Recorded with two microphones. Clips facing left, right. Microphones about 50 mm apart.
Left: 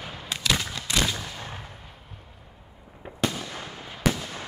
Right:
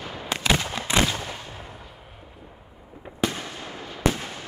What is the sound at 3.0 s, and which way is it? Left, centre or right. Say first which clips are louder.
Fireworks: left 1 dB; centre.